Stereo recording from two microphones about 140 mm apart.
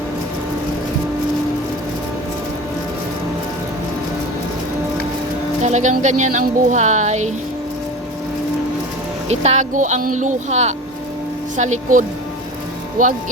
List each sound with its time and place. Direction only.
5.6 s speech: 60° right (ahead or behind)
9.3 s speech: 50° right (ahead or behind); by 13.1 s 70° right (ahead or behind)